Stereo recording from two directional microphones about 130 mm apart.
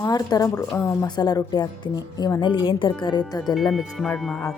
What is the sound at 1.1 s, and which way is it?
A woman's voice, 35° left (ahead or behind).